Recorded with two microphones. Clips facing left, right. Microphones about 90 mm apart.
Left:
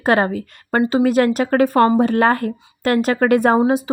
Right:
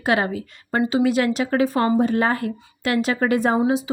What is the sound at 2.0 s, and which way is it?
Speech, 65° left (ahead or behind).